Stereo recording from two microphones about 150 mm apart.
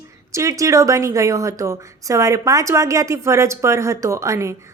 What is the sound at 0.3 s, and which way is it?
A woman's voice, 20° right (ahead or behind).